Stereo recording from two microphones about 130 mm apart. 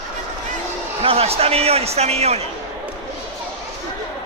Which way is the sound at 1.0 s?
50° right (ahead or behind).